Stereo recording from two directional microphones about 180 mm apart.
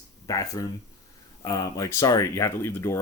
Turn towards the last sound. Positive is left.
turn(degrees=15)  # may be behind; listen again after turning